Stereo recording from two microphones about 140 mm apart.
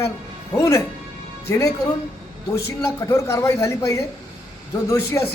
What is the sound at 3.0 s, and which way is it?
A woman's voice, 15° left (ahead or behind).